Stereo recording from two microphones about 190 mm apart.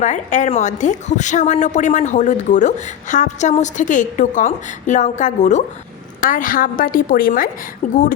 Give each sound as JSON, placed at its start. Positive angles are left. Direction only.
{"t": 0.0, "sound": "a woman's voice", "side_deg": 40}